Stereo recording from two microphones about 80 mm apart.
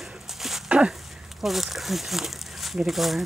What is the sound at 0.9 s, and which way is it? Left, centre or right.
Speech, centre.